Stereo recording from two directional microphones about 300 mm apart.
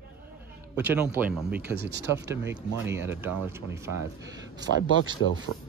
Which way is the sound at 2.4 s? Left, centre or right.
Centre.